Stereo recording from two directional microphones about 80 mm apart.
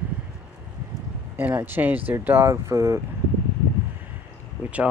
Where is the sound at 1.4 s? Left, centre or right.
Right.